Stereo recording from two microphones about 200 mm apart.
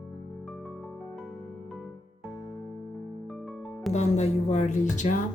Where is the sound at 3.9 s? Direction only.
35° left (ahead or behind).